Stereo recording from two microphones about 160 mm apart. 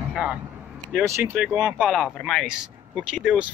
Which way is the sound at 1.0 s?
15° right (ahead or behind).